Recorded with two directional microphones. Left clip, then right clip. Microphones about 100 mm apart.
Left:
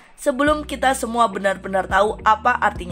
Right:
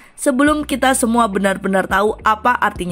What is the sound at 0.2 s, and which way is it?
A woman's voice, 35° right (ahead or behind).